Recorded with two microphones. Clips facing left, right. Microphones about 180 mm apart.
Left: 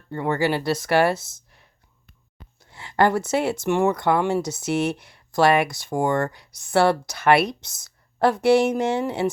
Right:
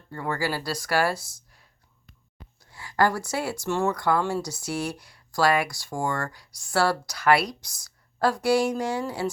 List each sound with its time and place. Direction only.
0.1 s speech: 25° left (ahead or behind)